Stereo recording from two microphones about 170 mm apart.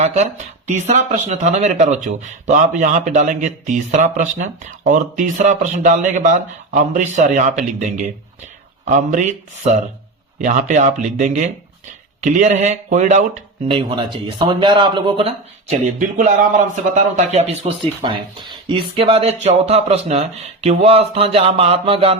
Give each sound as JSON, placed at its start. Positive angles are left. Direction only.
{"t": 0.0, "sound": "speech", "side_deg": -40}
{"t": 13.7, "sound": "speech", "side_deg": -30}
{"t": 15.7, "sound": "speech", "side_deg": -45}